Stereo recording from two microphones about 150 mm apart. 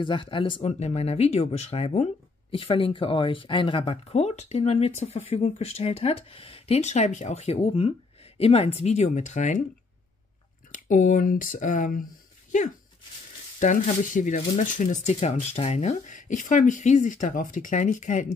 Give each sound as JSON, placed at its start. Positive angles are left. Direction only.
{"t": 0.0, "sound": "speech", "side_deg": 35}
{"t": 10.7, "sound": "speech", "side_deg": 60}